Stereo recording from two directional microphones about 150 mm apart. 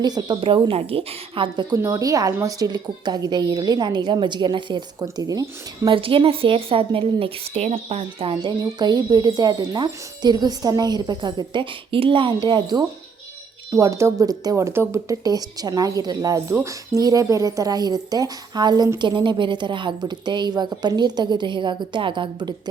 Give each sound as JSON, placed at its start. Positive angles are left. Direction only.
{"t": 0.0, "sound": "a woman's voice", "side_deg": -25}
{"t": 1.7, "sound": "a woman's voice", "side_deg": -20}